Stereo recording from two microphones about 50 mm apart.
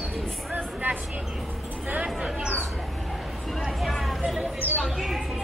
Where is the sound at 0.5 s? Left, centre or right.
Right.